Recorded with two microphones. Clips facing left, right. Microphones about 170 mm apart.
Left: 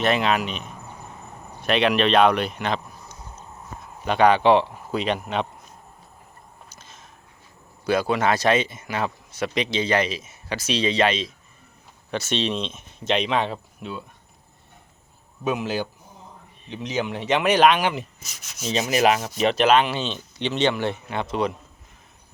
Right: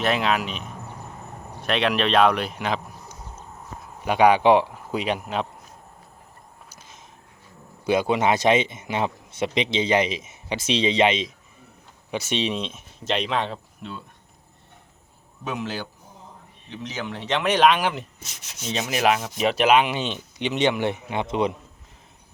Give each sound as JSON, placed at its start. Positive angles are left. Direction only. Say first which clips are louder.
{"t": 0.0, "sound": "speech", "louder": "left 1 dB", "side_deg": 0}
{"t": 6.7, "sound": "a sound", "louder": "even", "side_deg": -15}
{"t": 7.9, "sound": "a man's voice", "louder": "right 1 dB", "side_deg": -20}
{"t": 15.4, "sound": "speech", "louder": "left 5 dB", "side_deg": 10}